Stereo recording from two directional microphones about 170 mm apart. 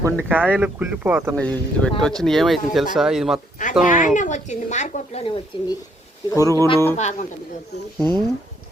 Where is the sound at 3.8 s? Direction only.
50° left (ahead or behind); by 5.7 s 30° left (ahead or behind).